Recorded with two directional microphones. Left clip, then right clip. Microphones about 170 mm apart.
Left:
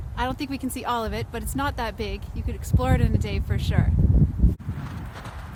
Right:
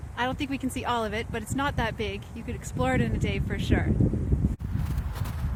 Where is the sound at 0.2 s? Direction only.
20° left (ahead or behind).